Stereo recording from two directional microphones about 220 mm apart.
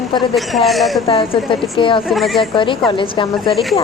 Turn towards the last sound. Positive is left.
turn(degrees=0)  # may be behind; listen again after turning